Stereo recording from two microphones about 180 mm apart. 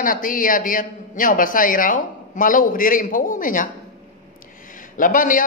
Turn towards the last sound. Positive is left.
turn(degrees=50)  # may be behind; listen again after turning